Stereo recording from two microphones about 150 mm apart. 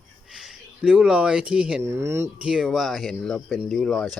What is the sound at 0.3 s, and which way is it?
Speech, 5° right (ahead or behind).